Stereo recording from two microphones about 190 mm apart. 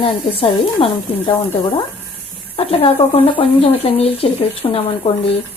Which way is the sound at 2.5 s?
30° left (ahead or behind).